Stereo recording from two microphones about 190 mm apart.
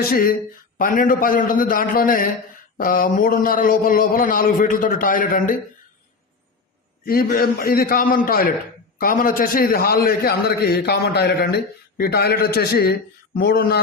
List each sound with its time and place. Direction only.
0.0 s a man's voice: 50° left (ahead or behind)
7.0 s a man's voice: 50° left (ahead or behind)